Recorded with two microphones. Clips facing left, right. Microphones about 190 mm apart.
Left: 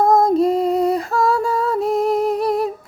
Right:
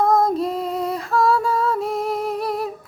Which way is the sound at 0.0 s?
35° left (ahead or behind).